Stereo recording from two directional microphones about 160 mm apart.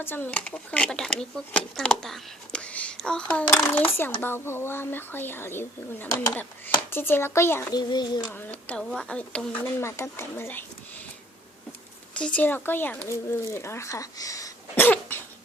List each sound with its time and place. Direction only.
0.0 s speech: 15° left (ahead or behind)
7.8 s a child's voice: 25° left (ahead or behind)
8.3 s speech: 10° left (ahead or behind)
12.1 s speech: 10° left (ahead or behind)